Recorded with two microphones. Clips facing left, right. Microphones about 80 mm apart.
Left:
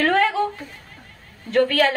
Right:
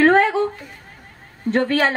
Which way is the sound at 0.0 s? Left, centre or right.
Right.